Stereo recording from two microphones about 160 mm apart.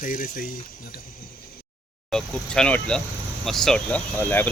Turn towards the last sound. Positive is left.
turn(degrees=10)  # may be behind; listen again after turning